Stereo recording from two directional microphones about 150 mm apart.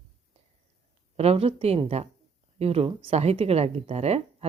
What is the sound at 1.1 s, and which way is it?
Speech, 45° right (ahead or behind).